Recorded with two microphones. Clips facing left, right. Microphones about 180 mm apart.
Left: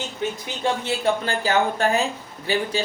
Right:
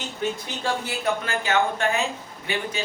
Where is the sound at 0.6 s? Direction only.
30° left (ahead or behind).